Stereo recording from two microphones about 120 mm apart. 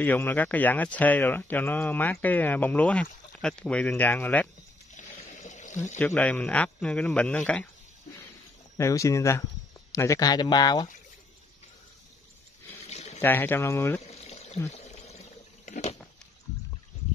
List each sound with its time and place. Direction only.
0.0 s speech: 15° left (ahead or behind)
4.9 s a sound: 90° left
5.9 s speech: 15° left (ahead or behind)
8.7 s speech: 25° left (ahead or behind)
12.8 s a sound: 70° left (ahead or behind)
13.2 s speech: 15° left (ahead or behind)
14.0 s pour: 65° left (ahead or behind); by 16.0 s 85° left